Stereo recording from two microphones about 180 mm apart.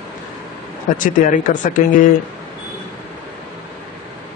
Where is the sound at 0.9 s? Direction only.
45° left (ahead or behind).